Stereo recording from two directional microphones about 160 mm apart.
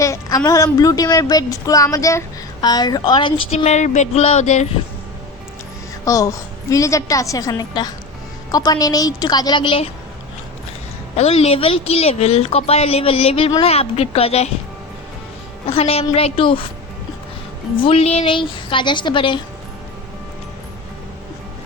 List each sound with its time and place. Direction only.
0.0 s a woman's voice: 20° left (ahead or behind)
3.6 s a sound: 45° left (ahead or behind)
6.1 s a woman's voice: 20° left (ahead or behind)
11.2 s a woman's voice: 40° left (ahead or behind)
15.6 s a woman's voice: 35° left (ahead or behind)
17.7 s a woman's voice: 35° left (ahead or behind)